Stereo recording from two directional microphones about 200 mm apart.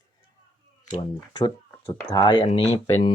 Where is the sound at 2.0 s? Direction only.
20° left (ahead or behind).